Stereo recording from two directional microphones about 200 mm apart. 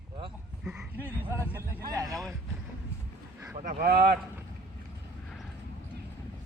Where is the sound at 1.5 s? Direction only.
15° right (ahead or behind).